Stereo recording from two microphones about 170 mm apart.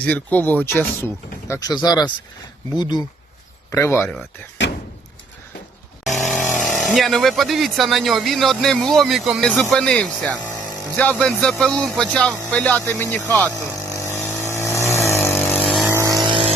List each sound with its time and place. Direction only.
0.0 s speech: 10° left (ahead or behind); by 3.0 s 25° left (ahead or behind)
3.7 s speech: 15° left (ahead or behind)
6.1 s speech: centre (ahead or behind)
13.8 s vehicle: 15° left (ahead or behind)
15.5 s vehicle: centre (ahead or behind)
16.0 s vehicle: 20° right (ahead or behind)